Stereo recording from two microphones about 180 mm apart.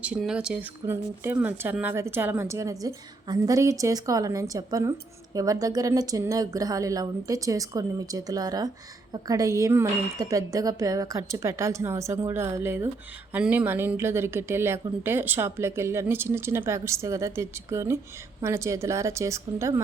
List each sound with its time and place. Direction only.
0.0 s a woman's voice: 5° right (ahead or behind)